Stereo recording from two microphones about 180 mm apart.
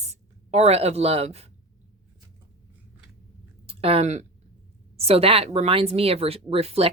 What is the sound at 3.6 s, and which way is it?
Speech, 35° right (ahead or behind).